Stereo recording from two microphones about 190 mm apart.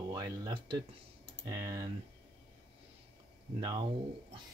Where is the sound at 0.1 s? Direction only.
20° right (ahead or behind).